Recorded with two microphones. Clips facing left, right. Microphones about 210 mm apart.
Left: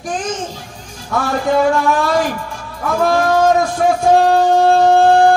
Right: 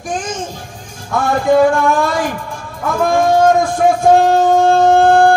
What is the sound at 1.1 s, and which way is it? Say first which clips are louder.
Speech: right 3 dB; 50° right (ahead or behind).